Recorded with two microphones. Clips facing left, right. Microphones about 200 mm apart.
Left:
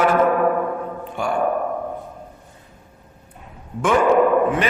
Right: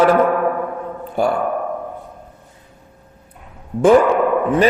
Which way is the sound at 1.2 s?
40° right (ahead or behind).